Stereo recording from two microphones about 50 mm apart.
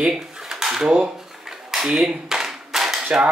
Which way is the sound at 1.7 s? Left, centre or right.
Centre.